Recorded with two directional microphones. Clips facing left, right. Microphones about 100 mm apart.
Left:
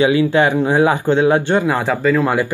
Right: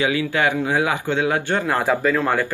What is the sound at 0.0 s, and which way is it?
Speech, 25° left (ahead or behind).